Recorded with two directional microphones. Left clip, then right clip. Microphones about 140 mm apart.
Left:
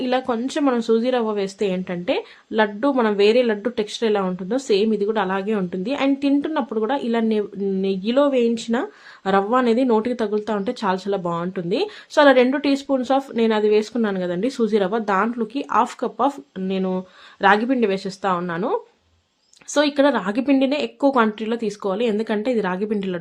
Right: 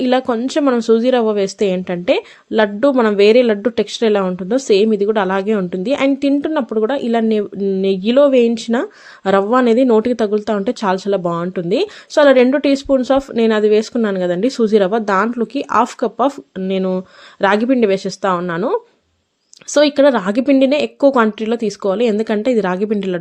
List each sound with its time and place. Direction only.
0.0 s speech: 40° right (ahead or behind)